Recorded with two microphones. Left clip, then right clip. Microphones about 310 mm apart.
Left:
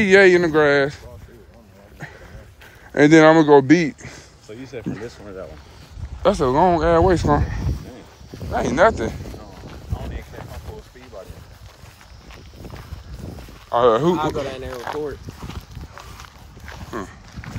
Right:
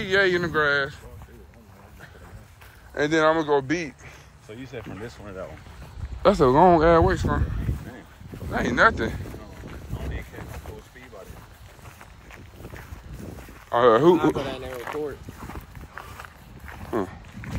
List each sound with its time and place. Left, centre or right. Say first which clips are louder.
0.0 s speech: left 9 dB; left
2.9 s speech: left 9 dB; left
4.6 s speech: left 6 dB; right
6.2 s speech: even; centre
7.2 s speech: left 9 dB; centre
9.7 s a sound: left 2 dB; left
13.7 s speech: left 1 dB; centre
14.5 s speech: left 3 dB; left
17.0 s speech: right 4 dB; centre